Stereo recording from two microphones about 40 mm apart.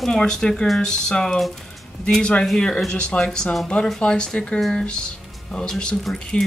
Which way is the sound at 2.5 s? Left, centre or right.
Centre.